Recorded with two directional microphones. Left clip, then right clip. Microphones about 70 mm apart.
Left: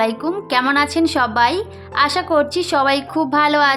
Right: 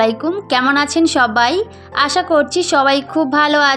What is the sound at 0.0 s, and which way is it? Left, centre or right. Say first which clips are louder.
A woman's voice: right 3 dB; right.